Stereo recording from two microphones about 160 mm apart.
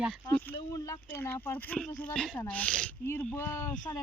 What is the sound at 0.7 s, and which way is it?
Speech, 20° left (ahead or behind).